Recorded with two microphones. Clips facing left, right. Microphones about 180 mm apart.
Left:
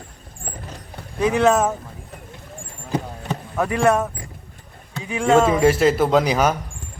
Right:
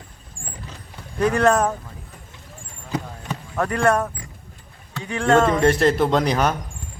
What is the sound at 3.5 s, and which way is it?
A man's voice, 5° left (ahead or behind).